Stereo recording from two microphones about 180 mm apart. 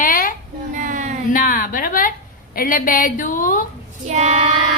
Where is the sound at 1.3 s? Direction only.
50° left (ahead or behind).